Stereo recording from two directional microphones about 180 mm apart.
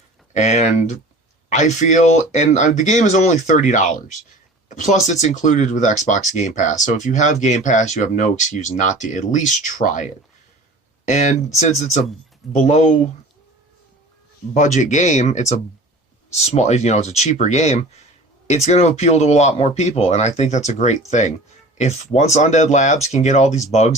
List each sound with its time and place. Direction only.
0.3 s speech: 40° left (ahead or behind)
14.5 s speech: 45° left (ahead or behind)